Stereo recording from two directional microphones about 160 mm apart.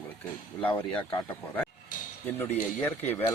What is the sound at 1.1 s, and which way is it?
Speech, 25° left (ahead or behind).